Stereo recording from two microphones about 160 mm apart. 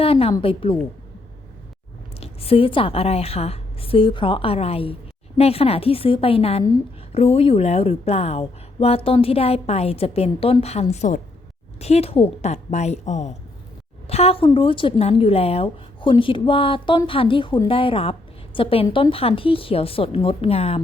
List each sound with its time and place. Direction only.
0.0 s a woman's voice: 35° left (ahead or behind)
2.2 s a woman's voice: 35° left (ahead or behind)